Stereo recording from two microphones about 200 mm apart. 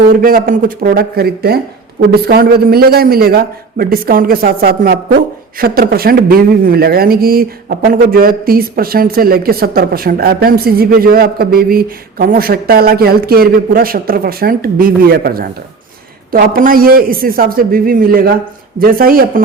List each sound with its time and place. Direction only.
0.1 s speech: 45° right (ahead or behind)